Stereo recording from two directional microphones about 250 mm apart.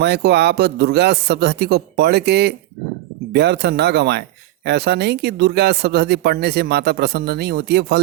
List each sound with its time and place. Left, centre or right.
0.0 s speech: right